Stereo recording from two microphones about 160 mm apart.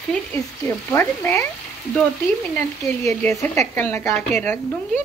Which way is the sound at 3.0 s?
15° left (ahead or behind).